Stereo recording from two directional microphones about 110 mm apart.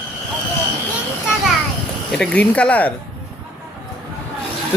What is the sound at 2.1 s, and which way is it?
Speech, 10° left (ahead or behind).